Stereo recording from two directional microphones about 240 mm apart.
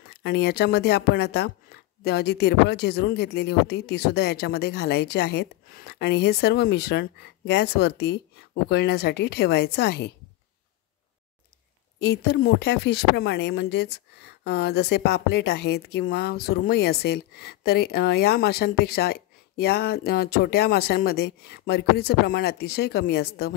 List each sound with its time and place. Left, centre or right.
0.2 s speech: left
12.0 s speech: left